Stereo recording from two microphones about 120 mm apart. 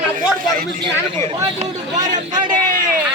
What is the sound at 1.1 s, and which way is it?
Speech, 50° right (ahead or behind).